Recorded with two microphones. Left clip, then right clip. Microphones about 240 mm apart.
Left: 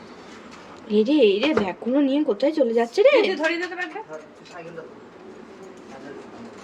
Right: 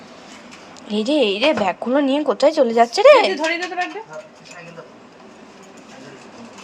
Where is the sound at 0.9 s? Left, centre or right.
Centre.